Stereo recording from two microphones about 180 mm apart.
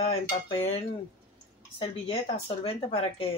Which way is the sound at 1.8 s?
35° left (ahead or behind).